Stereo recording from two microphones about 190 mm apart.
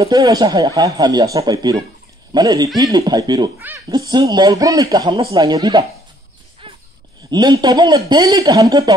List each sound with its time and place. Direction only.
0.0 s speech: 20° right (ahead or behind)
3.5 s speech: 10° right (ahead or behind)
3.9 s speech: 20° right (ahead or behind)
6.6 s a sound: 30° right (ahead or behind)
7.2 s speech: 20° right (ahead or behind)